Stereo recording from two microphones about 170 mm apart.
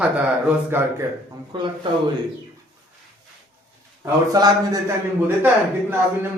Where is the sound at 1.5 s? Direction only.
25° right (ahead or behind).